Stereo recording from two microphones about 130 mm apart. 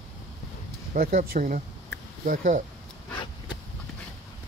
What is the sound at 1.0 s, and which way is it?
Speech, 75° right (ahead or behind).